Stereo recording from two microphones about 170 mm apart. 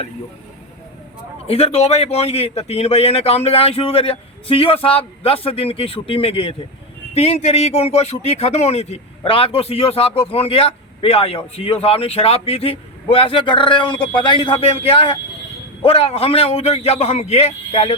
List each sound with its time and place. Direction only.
1.5 s speech: 35° left (ahead or behind)